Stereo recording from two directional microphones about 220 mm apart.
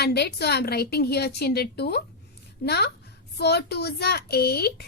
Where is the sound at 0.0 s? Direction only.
45° left (ahead or behind).